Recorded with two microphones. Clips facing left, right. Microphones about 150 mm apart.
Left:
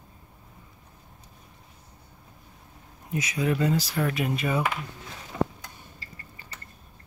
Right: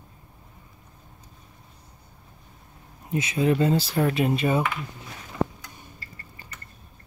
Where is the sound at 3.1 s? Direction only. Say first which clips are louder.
Right 4 dB; 25° right (ahead or behind).